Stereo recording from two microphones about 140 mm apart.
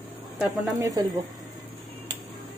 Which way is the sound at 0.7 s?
25° right (ahead or behind).